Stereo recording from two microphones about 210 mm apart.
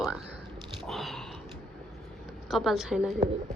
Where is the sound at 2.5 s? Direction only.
Centre (ahead or behind).